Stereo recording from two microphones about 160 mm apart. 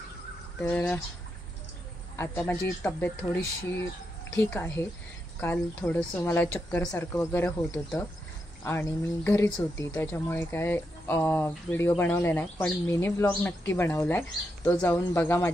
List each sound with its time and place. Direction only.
0.6 s speech: 10° left (ahead or behind)
2.1 s speech: 15° left (ahead or behind)